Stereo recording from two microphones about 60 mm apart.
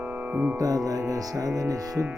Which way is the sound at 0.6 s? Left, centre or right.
Right.